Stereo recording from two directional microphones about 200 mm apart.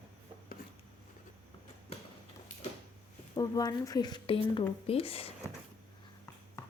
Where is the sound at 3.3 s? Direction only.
20° left (ahead or behind).